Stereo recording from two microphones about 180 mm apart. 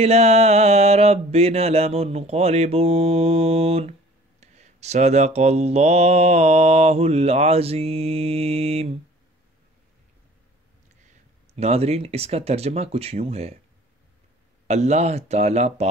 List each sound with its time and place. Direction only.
0.0 s mantra: 35° right (ahead or behind)
11.5 s mantra: 35° right (ahead or behind)
14.7 s mantra: 40° right (ahead or behind)